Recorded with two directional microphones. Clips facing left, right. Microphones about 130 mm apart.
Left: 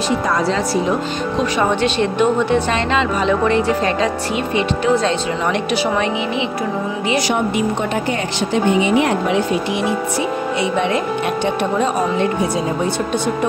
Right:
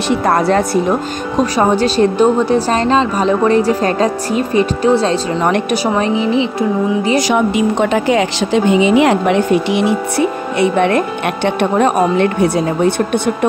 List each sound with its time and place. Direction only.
0.3 s speech: 55° right (ahead or behind)
1.4 s a woman's voice: 40° right (ahead or behind)
5.4 s a woman's voice: 50° right (ahead or behind)
6.0 s a woman's voice: 35° right (ahead or behind)
7.8 s a woman's voice: 90° right; by 12.9 s 65° right (ahead or behind)